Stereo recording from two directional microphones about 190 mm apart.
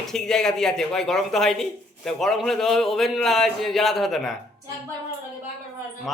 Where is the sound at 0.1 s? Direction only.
5° left (ahead or behind).